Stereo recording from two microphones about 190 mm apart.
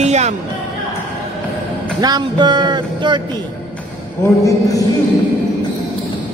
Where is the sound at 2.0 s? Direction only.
20° right (ahead or behind).